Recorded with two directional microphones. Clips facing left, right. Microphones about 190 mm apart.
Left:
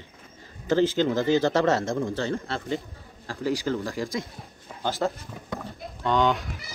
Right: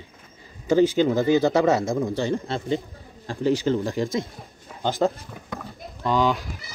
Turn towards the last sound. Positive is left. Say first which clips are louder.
# right 1 dB
turn(degrees=0)  # may be behind; listen again after turning